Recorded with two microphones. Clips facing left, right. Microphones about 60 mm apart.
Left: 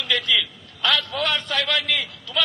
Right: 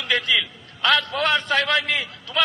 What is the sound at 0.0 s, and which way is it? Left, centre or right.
A man's voice, right.